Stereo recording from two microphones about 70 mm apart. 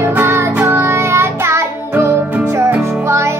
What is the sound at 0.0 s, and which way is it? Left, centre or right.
Music, right.